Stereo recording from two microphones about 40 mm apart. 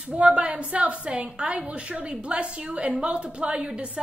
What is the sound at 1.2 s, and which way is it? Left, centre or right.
A woman's voice, right.